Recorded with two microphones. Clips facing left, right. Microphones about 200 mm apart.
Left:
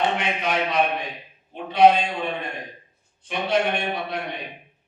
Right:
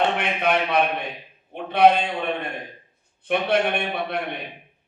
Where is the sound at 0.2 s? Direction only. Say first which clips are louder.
Right 2 dB; 60° right (ahead or behind).